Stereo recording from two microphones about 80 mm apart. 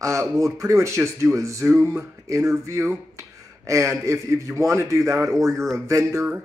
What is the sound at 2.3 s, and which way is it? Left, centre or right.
Speech, right.